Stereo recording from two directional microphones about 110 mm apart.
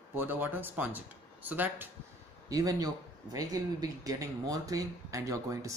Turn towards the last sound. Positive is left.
turn(degrees=-30)  # may be behind; listen again after turning